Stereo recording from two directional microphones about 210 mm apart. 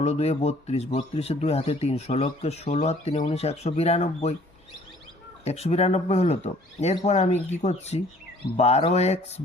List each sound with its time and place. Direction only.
0.0 s speech: 30° left (ahead or behind)
5.5 s speech: 30° left (ahead or behind)